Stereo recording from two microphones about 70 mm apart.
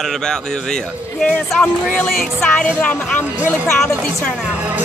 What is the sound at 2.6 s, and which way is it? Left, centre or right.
Speech, centre.